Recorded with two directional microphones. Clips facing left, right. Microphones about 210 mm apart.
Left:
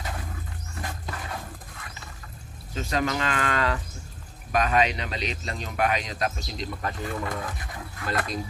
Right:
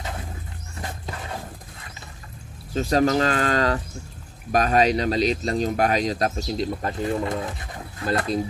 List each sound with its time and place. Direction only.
2.7 s speech: 35° right (ahead or behind)